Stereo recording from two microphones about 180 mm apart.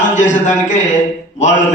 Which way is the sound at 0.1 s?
40° left (ahead or behind).